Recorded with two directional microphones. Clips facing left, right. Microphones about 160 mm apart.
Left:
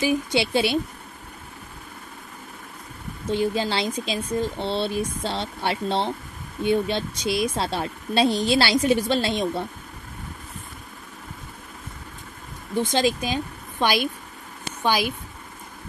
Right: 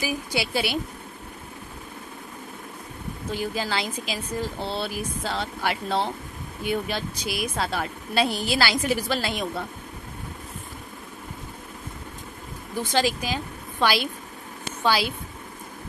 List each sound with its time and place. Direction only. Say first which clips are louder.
0.0 s a woman's voice: left 6 dB; 25° left (ahead or behind)
3.3 s a woman's voice: left 5 dB; 25° left (ahead or behind)
12.9 s a woman's voice: even; 20° left (ahead or behind)